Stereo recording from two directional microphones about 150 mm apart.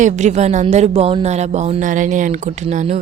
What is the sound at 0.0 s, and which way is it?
Speech, 50° right (ahead or behind).